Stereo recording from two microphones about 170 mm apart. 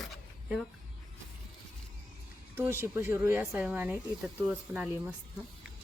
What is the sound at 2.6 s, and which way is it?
Speech, 15° right (ahead or behind).